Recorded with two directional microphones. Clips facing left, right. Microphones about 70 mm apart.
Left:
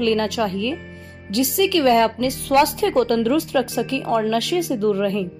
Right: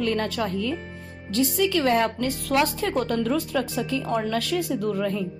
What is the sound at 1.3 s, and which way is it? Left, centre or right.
A woman's voice, left.